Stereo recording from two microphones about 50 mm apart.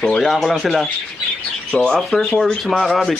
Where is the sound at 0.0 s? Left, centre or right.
Centre.